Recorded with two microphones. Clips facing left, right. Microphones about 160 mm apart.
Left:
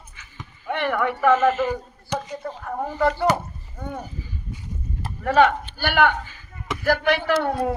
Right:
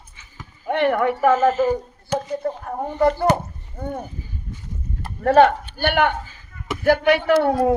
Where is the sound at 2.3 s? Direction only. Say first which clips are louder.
Right 6 dB; 45° right (ahead or behind).